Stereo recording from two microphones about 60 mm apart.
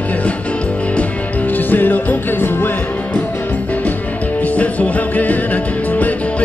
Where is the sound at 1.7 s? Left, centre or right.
Left.